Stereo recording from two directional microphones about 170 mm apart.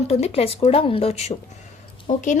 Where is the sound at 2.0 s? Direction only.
45° left (ahead or behind).